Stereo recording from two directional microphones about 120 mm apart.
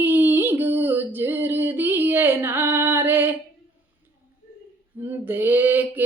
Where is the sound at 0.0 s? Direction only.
15° right (ahead or behind).